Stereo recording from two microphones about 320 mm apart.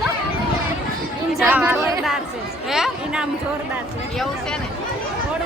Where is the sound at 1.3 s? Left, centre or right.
Centre.